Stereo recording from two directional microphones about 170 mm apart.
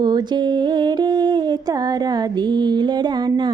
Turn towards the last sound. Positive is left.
turn(degrees=-25)  # may be behind; listen again after turning